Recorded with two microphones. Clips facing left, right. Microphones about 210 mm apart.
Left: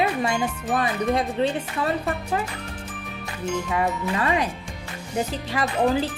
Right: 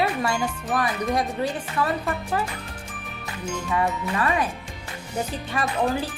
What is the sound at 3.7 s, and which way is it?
Speech, 20° left (ahead or behind).